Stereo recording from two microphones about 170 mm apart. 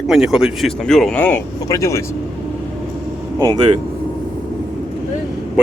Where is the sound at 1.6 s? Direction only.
20° left (ahead or behind).